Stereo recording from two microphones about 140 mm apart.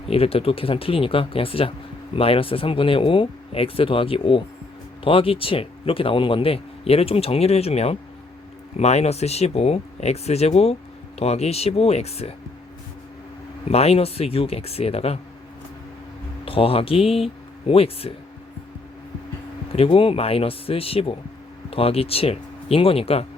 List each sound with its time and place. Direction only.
0.1 s speech: 45° left (ahead or behind)
13.7 s speech: 45° left (ahead or behind)
16.5 s speech: 40° left (ahead or behind)
19.7 s speech: 40° left (ahead or behind)